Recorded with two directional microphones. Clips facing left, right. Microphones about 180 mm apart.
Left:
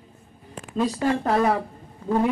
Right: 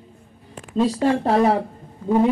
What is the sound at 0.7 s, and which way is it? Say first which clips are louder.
A woman's voice: right 4 dB; 30° right (ahead or behind).